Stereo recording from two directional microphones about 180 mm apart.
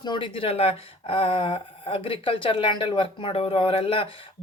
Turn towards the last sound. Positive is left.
turn(degrees=30)  # may be behind; listen again after turning